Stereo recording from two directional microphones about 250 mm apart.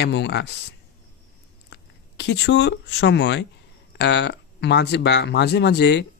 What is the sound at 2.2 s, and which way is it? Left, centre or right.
Speech, left.